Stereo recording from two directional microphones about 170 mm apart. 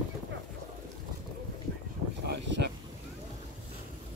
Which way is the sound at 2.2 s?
80° right.